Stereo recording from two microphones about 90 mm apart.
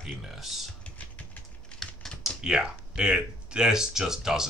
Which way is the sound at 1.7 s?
5° left (ahead or behind).